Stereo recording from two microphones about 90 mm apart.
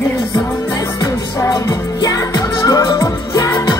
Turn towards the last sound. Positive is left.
turn(degrees=40)  # may be behind; listen again after turning